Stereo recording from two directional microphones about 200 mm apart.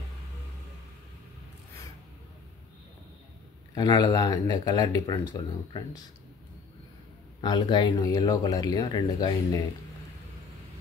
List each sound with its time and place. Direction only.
3.7 s speech: 20° left (ahead or behind)
7.4 s speech: 20° left (ahead or behind)